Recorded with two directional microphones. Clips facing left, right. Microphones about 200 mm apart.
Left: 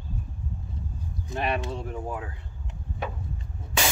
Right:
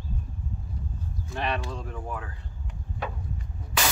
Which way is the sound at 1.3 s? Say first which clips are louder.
Left 2 dB; 20° left (ahead or behind).